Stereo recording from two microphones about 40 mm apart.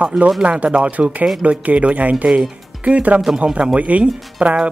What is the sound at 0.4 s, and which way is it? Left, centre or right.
Speech, right.